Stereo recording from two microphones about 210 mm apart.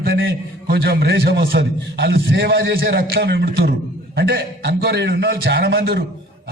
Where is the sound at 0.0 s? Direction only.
60° right (ahead or behind).